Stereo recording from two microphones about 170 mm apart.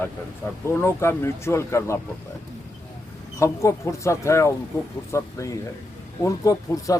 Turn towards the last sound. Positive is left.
turn(degrees=20)  # may be behind; listen again after turning